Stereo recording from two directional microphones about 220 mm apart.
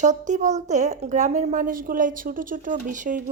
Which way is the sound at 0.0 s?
35° right (ahead or behind).